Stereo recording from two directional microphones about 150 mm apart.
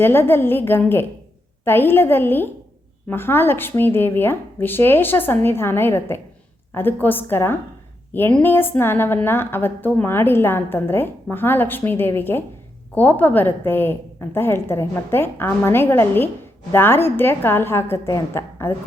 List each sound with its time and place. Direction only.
0.0 s a woman's voice: 15° left (ahead or behind)